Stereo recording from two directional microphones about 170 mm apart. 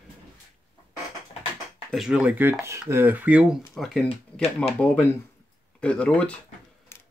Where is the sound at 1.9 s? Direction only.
5° right (ahead or behind).